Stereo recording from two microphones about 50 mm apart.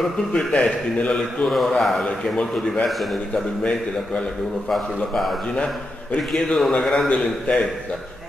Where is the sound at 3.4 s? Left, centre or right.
Centre.